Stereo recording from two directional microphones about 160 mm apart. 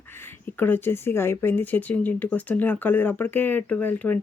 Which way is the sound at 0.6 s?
15° left (ahead or behind).